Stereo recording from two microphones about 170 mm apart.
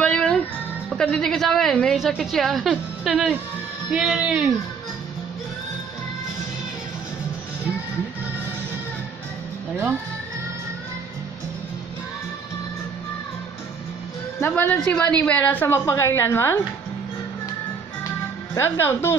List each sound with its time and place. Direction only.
0.0 s music: 5° left (ahead or behind)
0.8 s a woman's voice: 5° left (ahead or behind)
14.4 s a woman's voice: 10° left (ahead or behind)
18.5 s a woman's voice: 15° left (ahead or behind)